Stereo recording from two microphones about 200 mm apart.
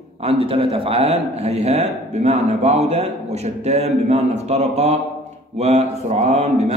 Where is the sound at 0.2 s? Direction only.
30° right (ahead or behind).